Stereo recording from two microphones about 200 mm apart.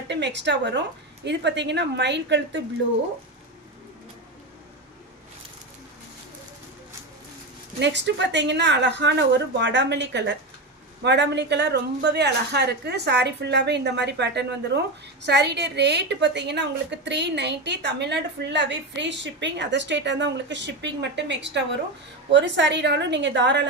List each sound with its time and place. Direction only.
0.1 s a woman's voice: 60° right (ahead or behind)
7.8 s a woman's voice: 60° right (ahead or behind)